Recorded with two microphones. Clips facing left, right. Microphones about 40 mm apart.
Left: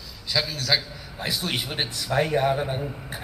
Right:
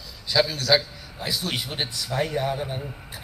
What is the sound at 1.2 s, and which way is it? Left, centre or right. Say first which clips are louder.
Speech: left 1 dB; left.